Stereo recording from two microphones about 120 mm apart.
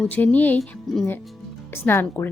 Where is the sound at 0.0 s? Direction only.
10° left (ahead or behind).